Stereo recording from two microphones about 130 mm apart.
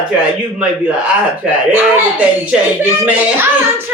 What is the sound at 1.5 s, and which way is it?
A woman's voice, 10° right (ahead or behind).